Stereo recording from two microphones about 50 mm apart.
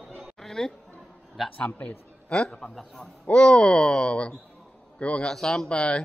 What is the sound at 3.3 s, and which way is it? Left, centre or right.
Chuckle, centre.